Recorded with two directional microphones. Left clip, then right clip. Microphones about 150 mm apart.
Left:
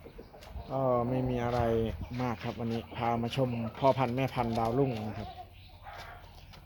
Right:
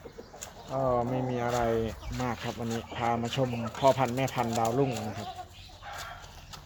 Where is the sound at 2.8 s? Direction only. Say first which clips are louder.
Right 2 dB; 15° left (ahead or behind).